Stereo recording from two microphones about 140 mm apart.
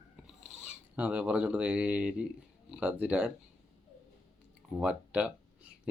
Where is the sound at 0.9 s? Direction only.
10° right (ahead or behind).